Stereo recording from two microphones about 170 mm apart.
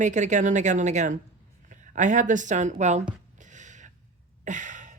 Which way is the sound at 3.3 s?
45° right (ahead or behind).